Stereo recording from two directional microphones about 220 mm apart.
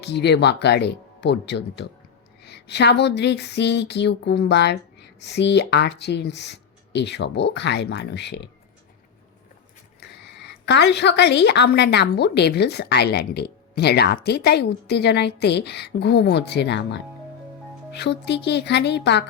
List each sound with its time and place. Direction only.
0.0 s a woman's voice: 50° left (ahead or behind)
10.0 s a woman's voice: 50° left (ahead or behind)